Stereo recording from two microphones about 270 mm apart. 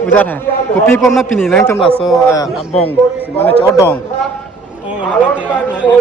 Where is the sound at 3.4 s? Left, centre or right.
Centre.